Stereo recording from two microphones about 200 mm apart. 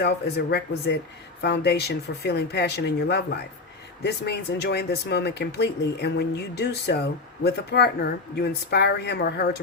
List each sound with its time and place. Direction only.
0.0 s speech: 55° left (ahead or behind)